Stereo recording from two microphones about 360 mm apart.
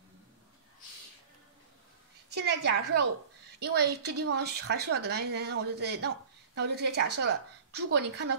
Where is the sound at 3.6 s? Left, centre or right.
Right.